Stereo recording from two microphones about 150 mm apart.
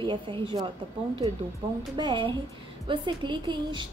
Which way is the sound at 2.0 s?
35° right (ahead or behind).